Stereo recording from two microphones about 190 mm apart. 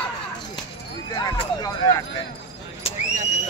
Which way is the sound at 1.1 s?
20° left (ahead or behind).